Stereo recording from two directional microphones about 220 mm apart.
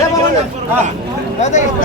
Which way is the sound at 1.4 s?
30° left (ahead or behind).